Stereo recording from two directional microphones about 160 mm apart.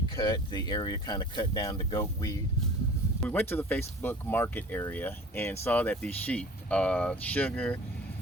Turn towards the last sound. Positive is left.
turn(degrees=10)  # may be behind; listen again after turning